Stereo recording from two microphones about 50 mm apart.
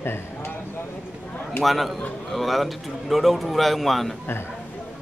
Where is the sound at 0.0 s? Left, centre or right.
Left.